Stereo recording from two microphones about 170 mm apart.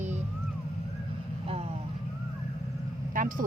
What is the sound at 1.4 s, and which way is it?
Speech, 35° right (ahead or behind).